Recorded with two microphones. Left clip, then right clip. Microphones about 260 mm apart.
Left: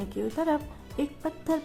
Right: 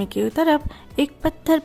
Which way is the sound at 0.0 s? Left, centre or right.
Right.